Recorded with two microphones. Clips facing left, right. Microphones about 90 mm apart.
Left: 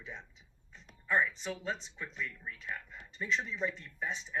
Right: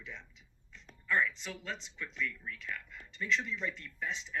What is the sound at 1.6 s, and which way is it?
Speech, 40° left (ahead or behind).